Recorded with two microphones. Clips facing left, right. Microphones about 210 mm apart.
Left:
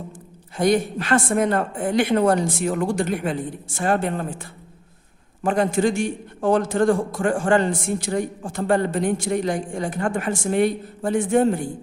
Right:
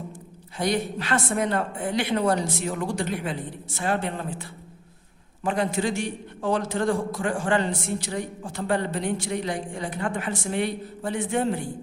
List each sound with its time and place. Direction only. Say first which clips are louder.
0.5 s a man's voice: left 6 dB; 50° left (ahead or behind)